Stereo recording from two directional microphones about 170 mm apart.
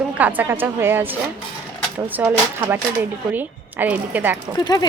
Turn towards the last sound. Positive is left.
turn(degrees=25)  # may be behind; listen again after turning